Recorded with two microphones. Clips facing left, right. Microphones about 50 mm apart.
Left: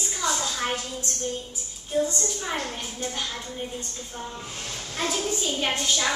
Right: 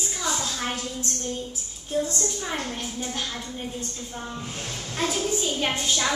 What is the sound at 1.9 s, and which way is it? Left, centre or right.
Speech, centre.